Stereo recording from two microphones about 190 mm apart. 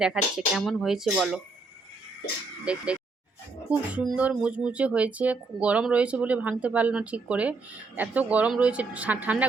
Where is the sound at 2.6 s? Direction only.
5° right (ahead or behind).